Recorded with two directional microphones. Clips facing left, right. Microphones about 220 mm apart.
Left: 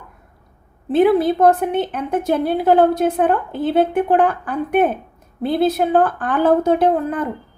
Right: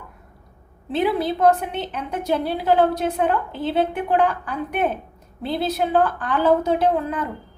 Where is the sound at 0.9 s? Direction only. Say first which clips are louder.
Left 7 dB; 50° left (ahead or behind).